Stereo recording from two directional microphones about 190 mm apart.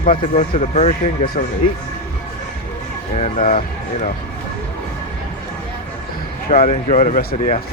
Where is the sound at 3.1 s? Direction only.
40° left (ahead or behind).